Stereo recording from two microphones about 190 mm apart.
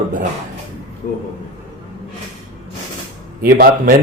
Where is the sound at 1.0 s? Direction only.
50° left (ahead or behind).